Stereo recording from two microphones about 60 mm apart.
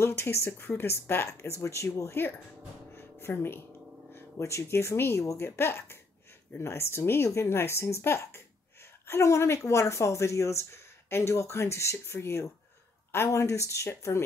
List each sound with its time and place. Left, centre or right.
0.0 s speech: left
2.9 s a sound: left
4.1 s speech: left
5.2 s speech: left
5.6 s speech: left